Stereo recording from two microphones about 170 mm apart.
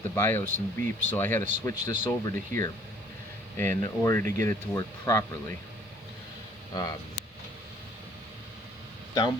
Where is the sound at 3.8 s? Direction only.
15° left (ahead or behind).